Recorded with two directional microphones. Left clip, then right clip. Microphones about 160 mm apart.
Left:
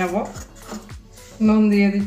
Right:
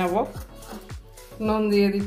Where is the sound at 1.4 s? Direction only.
60° right (ahead or behind).